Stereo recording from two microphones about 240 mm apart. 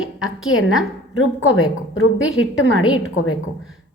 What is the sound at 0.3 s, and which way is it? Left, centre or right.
A woman's voice, left.